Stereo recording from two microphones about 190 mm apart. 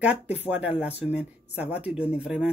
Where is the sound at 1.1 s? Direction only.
5° right (ahead or behind).